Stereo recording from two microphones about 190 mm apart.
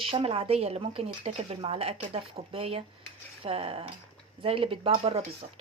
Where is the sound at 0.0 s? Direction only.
30° right (ahead or behind).